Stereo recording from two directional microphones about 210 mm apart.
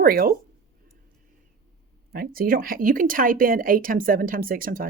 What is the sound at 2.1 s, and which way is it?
Speech, 45° right (ahead or behind).